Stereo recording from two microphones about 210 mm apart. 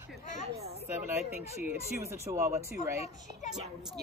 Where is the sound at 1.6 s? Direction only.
10° right (ahead or behind).